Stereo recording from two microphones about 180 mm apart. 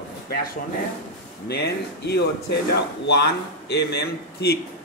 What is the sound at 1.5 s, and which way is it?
Speech, 65° left (ahead or behind).